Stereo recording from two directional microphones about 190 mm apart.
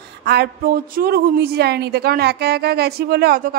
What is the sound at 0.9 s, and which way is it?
A woman's voice, 55° right (ahead or behind).